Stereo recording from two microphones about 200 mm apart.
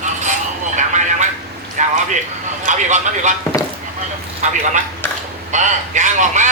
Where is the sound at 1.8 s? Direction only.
40° right (ahead or behind).